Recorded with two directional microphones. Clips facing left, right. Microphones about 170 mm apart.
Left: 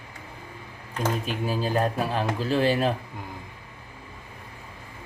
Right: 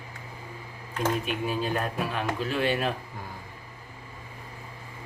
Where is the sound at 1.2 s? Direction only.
35° left (ahead or behind).